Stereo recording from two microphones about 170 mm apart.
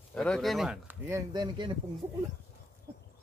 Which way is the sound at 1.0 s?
20° right (ahead or behind).